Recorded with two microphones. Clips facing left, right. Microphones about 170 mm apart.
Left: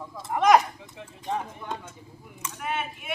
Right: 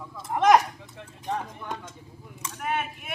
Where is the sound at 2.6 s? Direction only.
45° right (ahead or behind).